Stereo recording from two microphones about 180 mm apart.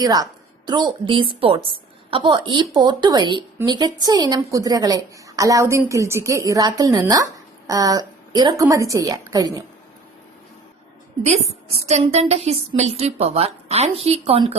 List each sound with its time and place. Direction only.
0.0 s a woman's voice: 20° right (ahead or behind)
11.2 s a woman's voice: 35° right (ahead or behind)